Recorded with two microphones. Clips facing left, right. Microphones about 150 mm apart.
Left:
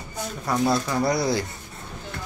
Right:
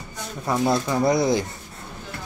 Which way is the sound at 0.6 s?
20° right (ahead or behind).